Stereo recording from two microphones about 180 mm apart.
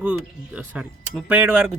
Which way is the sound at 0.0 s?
5° right (ahead or behind).